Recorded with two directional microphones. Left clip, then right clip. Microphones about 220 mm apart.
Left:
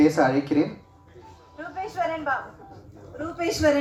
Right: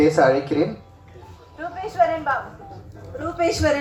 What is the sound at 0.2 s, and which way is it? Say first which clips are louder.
Speech: right 5 dB; 50° left (ahead or behind).